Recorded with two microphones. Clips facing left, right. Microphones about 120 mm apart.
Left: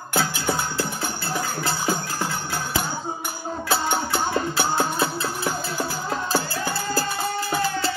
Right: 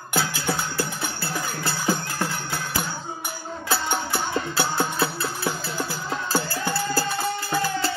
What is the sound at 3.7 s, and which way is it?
Music, 20° left (ahead or behind).